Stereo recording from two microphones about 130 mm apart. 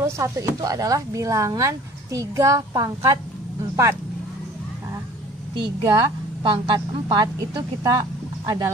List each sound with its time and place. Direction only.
0.0 s speech: 25° right (ahead or behind)
5.9 s a woman's voice: 35° right (ahead or behind)